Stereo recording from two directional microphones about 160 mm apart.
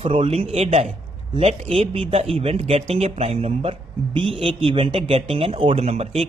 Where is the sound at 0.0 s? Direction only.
35° right (ahead or behind).